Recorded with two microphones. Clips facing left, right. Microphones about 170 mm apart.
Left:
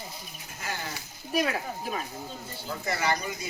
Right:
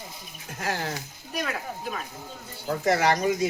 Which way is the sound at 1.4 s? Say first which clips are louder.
Left 2 dB; 30° left (ahead or behind).